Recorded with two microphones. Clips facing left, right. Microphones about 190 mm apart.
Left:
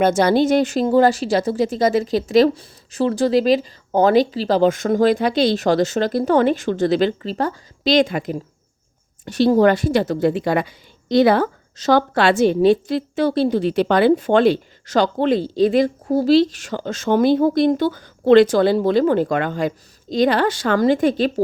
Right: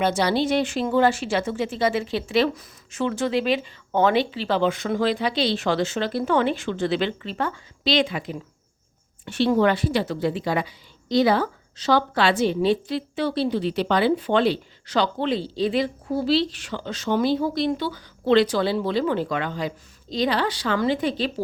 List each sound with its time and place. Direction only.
0.0 s a woman's voice: 50° left (ahead or behind)